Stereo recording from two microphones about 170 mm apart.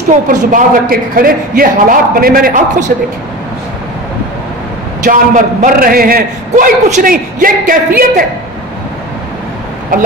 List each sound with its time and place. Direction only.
0.1 s a man's voice: 50° right (ahead or behind)
5.0 s a man's voice: 45° right (ahead or behind)